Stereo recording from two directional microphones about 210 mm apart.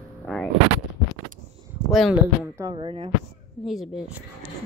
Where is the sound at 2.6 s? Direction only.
25° right (ahead or behind).